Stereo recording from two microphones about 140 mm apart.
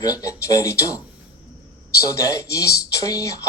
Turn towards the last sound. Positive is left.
turn(degrees=25)  # may be behind; listen again after turning